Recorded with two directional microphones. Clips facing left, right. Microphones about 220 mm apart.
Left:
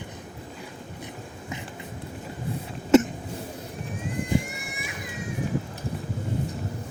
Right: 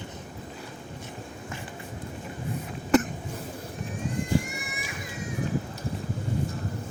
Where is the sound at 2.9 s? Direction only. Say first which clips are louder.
Left 5 dB; 25° left (ahead or behind).